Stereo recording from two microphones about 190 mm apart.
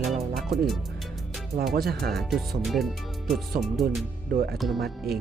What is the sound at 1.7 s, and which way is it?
Speech, 55° right (ahead or behind).